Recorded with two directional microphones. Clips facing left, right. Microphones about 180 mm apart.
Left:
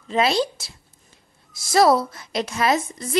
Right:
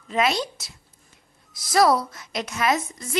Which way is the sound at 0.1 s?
30° left (ahead or behind).